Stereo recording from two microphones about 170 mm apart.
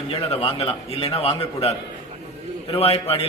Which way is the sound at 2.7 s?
35° left (ahead or behind).